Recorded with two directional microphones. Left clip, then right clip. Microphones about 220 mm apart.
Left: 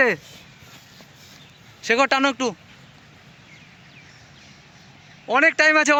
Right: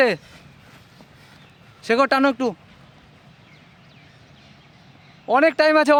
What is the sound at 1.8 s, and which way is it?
Speech, 45° right (ahead or behind).